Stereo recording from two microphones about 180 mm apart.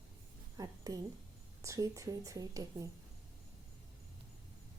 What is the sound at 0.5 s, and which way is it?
A woman's voice, 20° right (ahead or behind).